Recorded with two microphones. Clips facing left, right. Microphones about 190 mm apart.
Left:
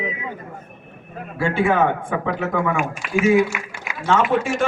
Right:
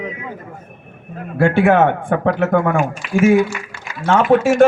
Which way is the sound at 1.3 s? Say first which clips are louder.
Right 6 dB; 70° right (ahead or behind).